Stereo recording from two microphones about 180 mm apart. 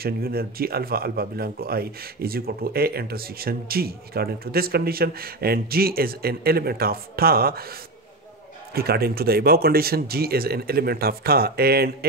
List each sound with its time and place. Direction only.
0.0 s speech: 55° right (ahead or behind)
8.7 s speech: 60° right (ahead or behind)